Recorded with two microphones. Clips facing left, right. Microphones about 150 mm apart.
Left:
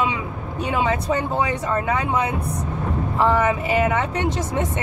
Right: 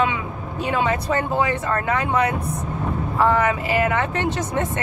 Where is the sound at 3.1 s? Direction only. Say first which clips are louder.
Even; 20° left (ahead or behind).